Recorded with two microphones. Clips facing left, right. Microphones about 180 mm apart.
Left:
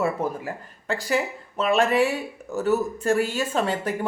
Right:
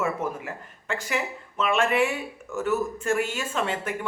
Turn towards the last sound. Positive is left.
turn(degrees=35)  # may be behind; listen again after turning